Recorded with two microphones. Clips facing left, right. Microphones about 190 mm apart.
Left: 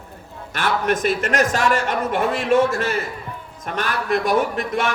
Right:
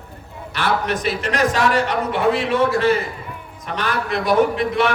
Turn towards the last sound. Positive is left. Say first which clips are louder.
# right 4 dB
turn(degrees=45)  # may be behind; listen again after turning